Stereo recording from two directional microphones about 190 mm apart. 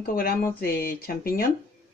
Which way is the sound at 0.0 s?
50° left (ahead or behind).